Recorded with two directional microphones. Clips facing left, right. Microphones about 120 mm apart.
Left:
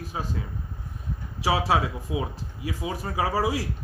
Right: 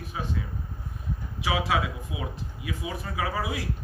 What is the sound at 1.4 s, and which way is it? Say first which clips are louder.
Speech: left 3 dB; 35° left (ahead or behind).